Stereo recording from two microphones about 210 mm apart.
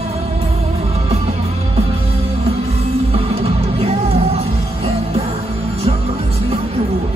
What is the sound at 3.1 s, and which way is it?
Music, 25° right (ahead or behind).